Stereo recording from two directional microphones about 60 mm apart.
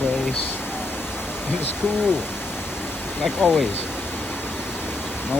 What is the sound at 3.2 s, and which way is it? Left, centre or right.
Speech, centre.